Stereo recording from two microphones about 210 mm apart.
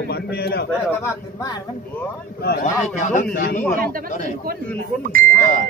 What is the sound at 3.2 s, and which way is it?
A man's voice, 45° left (ahead or behind).